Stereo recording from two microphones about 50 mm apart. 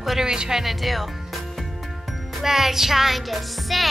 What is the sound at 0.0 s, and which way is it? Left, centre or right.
Speech, centre.